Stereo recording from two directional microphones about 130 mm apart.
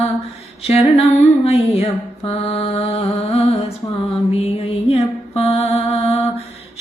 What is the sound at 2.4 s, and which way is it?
Mantra, 50° left (ahead or behind).